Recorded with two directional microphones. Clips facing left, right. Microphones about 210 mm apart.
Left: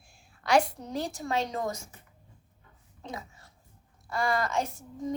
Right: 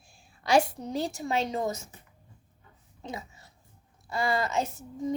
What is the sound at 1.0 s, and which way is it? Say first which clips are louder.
Speech: right 1 dB; 25° right (ahead or behind).